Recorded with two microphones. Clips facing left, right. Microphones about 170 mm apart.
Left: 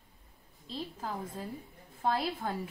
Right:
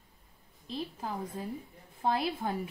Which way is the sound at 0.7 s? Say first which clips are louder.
Right 2 dB; 10° right (ahead or behind).